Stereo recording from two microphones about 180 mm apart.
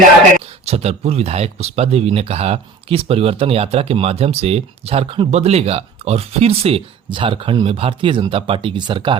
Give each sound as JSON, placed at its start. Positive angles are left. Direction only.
{"t": 0.6, "sound": "speech", "side_deg": -35}